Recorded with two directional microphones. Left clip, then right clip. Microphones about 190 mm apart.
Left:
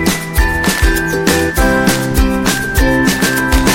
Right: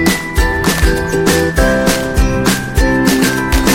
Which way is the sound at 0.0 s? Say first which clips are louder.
Right 1 dB; centre (ahead or behind).